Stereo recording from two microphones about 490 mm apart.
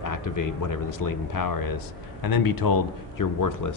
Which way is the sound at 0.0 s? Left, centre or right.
Left.